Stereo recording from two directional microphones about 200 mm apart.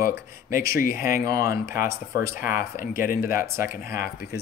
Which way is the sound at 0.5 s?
45° left (ahead or behind).